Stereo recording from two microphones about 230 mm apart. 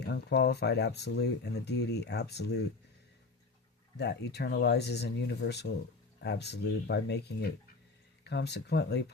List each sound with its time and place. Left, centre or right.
0.0 s speech: left
3.9 s speech: left